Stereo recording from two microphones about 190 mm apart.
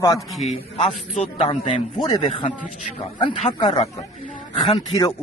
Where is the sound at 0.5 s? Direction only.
35° left (ahead or behind).